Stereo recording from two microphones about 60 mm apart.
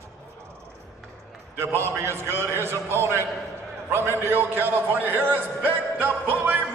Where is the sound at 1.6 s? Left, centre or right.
Right.